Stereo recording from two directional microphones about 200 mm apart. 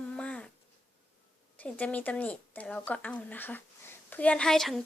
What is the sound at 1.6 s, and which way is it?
A woman's voice, 5° left (ahead or behind).